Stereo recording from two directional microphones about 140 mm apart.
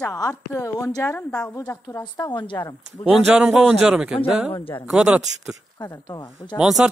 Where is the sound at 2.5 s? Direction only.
15° left (ahead or behind).